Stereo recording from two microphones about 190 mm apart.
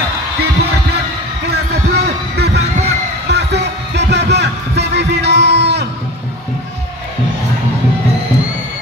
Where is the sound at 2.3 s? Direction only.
60° right (ahead or behind).